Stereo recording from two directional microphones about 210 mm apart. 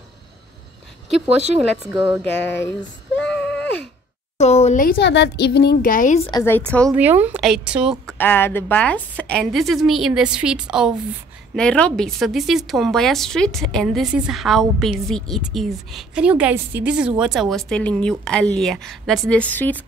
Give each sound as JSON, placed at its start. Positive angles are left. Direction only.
{"t": 1.6, "sound": "speech", "side_deg": -5}
{"t": 2.3, "sound": "speech", "side_deg": 55}
{"t": 3.3, "sound": "a sound", "side_deg": 5}
{"t": 4.4, "sound": "speech", "side_deg": 30}
{"t": 6.3, "sound": "a woman's voice", "side_deg": 10}
{"t": 6.9, "sound": "speech", "side_deg": -10}
{"t": 7.2, "sound": "a sound", "side_deg": -5}
{"t": 8.2, "sound": "a woman's voice", "side_deg": 10}